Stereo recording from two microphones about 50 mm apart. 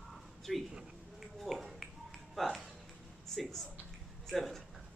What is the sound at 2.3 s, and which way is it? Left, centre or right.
Music, centre.